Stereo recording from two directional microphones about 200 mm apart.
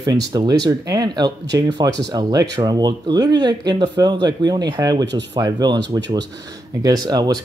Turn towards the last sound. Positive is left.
turn(degrees=-20)  # may be behind; listen again after turning